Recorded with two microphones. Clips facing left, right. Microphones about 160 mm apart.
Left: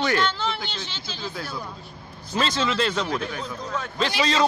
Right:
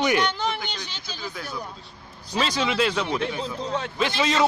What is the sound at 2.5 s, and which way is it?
Speech, 10° right (ahead or behind).